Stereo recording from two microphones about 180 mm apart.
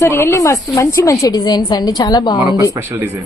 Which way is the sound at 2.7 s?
15° right (ahead or behind).